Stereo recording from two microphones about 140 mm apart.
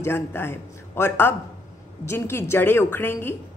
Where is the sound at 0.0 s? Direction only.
15° left (ahead or behind).